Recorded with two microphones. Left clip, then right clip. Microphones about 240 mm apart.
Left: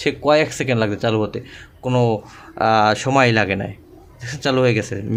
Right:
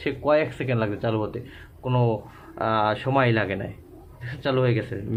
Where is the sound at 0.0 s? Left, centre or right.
Left.